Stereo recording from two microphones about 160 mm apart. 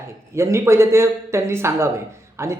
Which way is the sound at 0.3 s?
15° right (ahead or behind).